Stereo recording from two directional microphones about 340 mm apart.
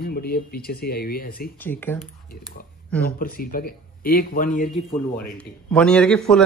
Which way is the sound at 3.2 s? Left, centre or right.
Left.